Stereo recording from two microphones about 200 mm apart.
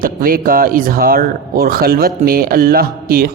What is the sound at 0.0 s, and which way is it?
Speech, 45° right (ahead or behind).